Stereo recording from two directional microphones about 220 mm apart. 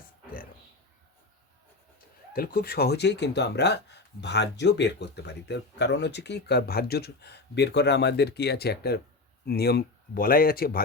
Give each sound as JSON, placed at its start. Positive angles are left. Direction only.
{"t": 2.3, "sound": "speech", "side_deg": 45}